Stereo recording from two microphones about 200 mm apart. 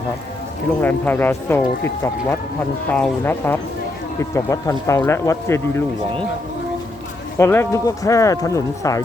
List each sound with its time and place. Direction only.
0.8 s speech: 10° left (ahead or behind)
2.9 s speech: 10° left (ahead or behind)
7.3 s speech: 15° left (ahead or behind)